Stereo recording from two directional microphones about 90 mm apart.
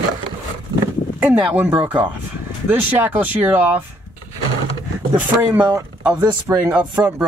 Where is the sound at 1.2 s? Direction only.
15° right (ahead or behind).